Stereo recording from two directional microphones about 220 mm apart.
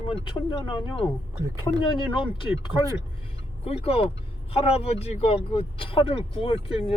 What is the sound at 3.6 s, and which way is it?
Speech, 25° left (ahead or behind).